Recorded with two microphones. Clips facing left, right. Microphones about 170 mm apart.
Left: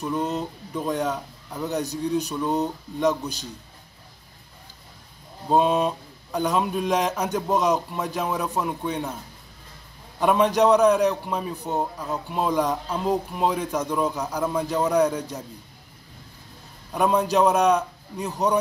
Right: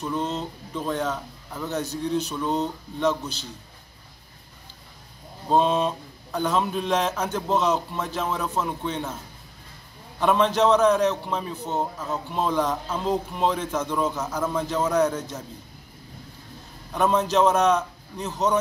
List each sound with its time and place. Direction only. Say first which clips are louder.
0.2 s speech: left 2 dB; 15° left (ahead or behind)
5.5 s speech: left 1 dB; 15° left (ahead or behind)
10.2 s speech: left 1 dB; 15° left (ahead or behind)
16.9 s speech: left 1 dB; 10° left (ahead or behind)